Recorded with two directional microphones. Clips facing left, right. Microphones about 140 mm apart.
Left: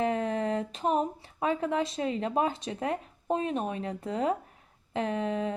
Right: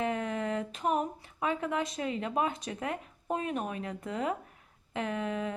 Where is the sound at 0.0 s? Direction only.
35° left (ahead or behind).